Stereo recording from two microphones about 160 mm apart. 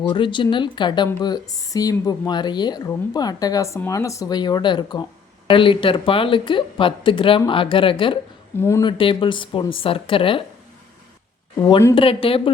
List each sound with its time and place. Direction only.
0.1 s speech: 30° left (ahead or behind)
11.9 s speech: 35° left (ahead or behind)